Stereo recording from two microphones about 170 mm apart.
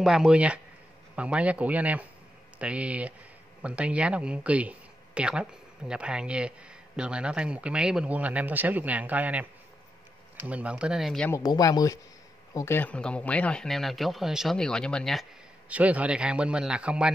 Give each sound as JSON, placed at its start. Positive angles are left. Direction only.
{"t": 0.0, "sound": "a man's voice", "side_deg": -5}
{"t": 11.2, "sound": "speech", "side_deg": 20}
{"t": 15.7, "sound": "speech", "side_deg": -10}